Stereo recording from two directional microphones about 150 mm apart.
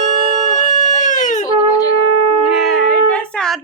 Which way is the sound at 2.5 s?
Centre (ahead or behind).